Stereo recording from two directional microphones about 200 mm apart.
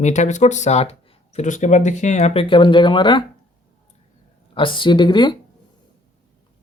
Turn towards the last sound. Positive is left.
turn(degrees=20)  # may be behind; listen again after turning